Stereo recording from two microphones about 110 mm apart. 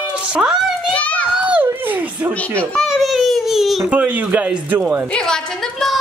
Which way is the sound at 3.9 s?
15° right (ahead or behind).